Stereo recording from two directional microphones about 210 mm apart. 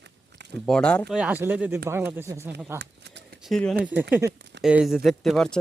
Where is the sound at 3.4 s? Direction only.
Centre (ahead or behind).